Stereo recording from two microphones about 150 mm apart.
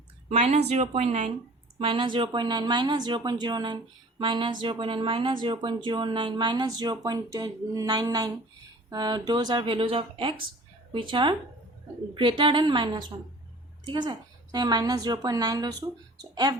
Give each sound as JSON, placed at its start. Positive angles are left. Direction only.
{"t": 0.3, "sound": "a woman's voice", "side_deg": -45}
{"t": 1.8, "sound": "a woman's voice", "side_deg": -35}